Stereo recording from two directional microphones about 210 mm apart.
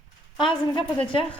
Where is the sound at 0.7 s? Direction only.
25° left (ahead or behind).